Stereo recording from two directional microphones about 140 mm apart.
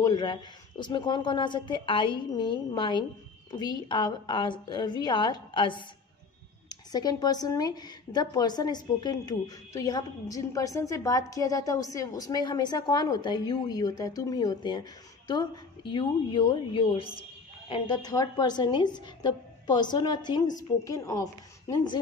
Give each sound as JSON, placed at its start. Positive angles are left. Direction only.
{"t": 0.0, "sound": "speech", "side_deg": 30}